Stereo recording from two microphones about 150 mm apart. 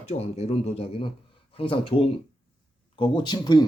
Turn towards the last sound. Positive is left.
turn(degrees=30)  # may be behind; listen again after turning